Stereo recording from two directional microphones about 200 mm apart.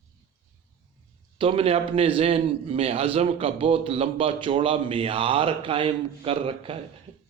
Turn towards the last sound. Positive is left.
turn(degrees=-30)  # may be behind; listen again after turning